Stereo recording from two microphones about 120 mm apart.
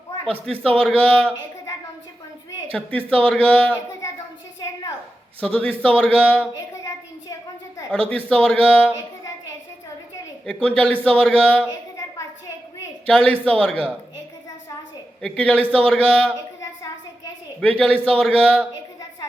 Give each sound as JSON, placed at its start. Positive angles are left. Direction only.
{"t": 0.6, "sound": "a man's voice", "side_deg": 10}
{"t": 3.1, "sound": "a man's voice", "side_deg": 10}
{"t": 5.4, "sound": "a man's voice", "side_deg": 10}
{"t": 6.5, "sound": "a sound", "side_deg": 30}
{"t": 7.9, "sound": "a man's voice", "side_deg": 10}
{"t": 10.4, "sound": "a man's voice", "side_deg": 10}
{"t": 11.7, "sound": "a sound", "side_deg": 30}
{"t": 13.1, "sound": "a man's voice", "side_deg": 10}
{"t": 15.2, "sound": "a man's voice", "side_deg": 10}
{"t": 17.6, "sound": "a man's voice", "side_deg": 10}